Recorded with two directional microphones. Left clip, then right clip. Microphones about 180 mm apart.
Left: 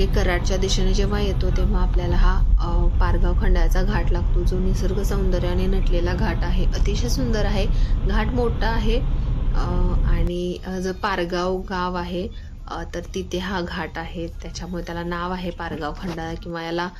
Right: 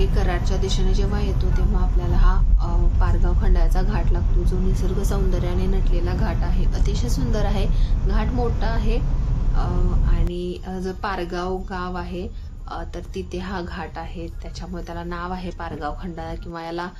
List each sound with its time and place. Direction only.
0.0 s a woman's voice: 20° left (ahead or behind)
10.1 s speech: 20° left (ahead or behind)